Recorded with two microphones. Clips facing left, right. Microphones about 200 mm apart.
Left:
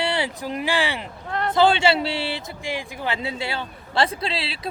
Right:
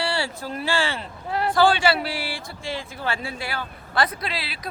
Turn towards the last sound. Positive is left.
turn(degrees=30)  # may be behind; listen again after turning